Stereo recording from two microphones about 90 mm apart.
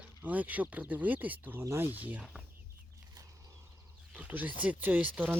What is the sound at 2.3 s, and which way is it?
Chicken, 15° right (ahead or behind).